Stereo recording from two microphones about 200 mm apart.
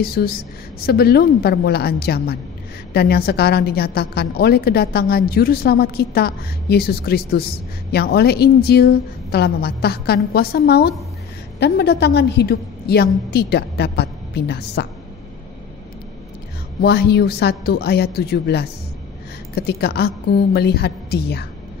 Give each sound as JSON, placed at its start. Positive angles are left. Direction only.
{"t": 0.0, "sound": "a woman's voice", "side_deg": 50}
{"t": 16.8, "sound": "a woman's voice", "side_deg": 55}